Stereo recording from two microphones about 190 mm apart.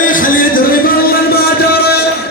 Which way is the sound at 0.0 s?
45° left (ahead or behind).